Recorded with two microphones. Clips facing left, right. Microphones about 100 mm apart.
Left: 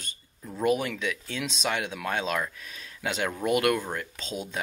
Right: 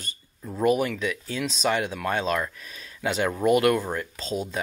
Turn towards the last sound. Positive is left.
turn(degrees=0)  # may be behind; listen again after turning